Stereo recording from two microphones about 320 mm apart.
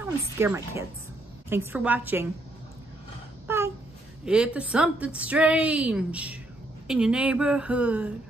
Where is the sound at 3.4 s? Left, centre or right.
Centre.